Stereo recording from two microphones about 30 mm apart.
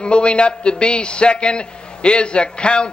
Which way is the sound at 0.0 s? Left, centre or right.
Left.